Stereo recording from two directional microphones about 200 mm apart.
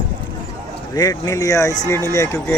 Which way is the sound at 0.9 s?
15° left (ahead or behind).